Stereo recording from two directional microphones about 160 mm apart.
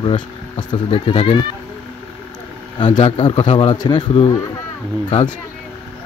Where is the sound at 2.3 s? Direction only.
30° left (ahead or behind).